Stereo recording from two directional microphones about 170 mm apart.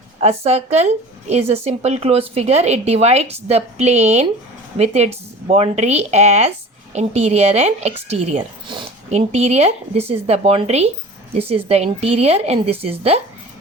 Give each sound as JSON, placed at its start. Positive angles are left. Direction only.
{"t": 0.2, "sound": "a woman's voice", "side_deg": -40}
{"t": 9.0, "sound": "a woman's voice", "side_deg": -40}